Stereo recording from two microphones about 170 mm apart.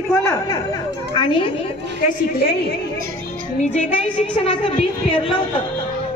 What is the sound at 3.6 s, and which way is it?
A woman's voice, 40° left (ahead or behind).